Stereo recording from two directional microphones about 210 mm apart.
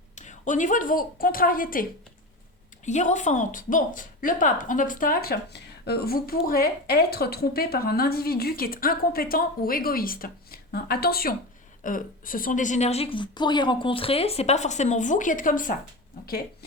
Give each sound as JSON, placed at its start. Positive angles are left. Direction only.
{"t": 0.2, "sound": "a woman's voice", "side_deg": 35}